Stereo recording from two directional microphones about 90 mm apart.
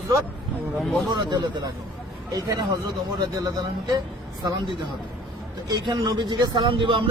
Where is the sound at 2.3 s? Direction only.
45° right (ahead or behind).